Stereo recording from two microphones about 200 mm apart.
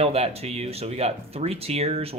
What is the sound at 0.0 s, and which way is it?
Speech, 30° right (ahead or behind).